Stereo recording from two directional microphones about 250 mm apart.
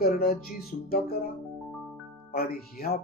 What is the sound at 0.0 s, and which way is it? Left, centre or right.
Speech, left.